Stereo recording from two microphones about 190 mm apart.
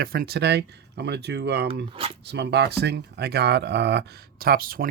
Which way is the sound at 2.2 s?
60° right (ahead or behind).